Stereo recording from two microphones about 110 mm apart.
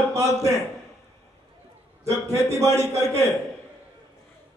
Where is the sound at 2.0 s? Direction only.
30° right (ahead or behind).